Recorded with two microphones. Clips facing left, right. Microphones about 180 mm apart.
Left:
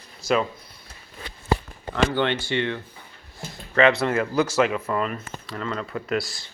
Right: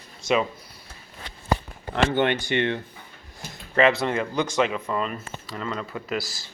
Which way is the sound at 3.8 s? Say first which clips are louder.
Left 1 dB; centre (ahead or behind).